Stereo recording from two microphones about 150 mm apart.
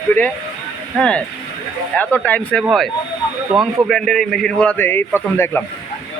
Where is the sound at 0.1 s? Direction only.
10° left (ahead or behind).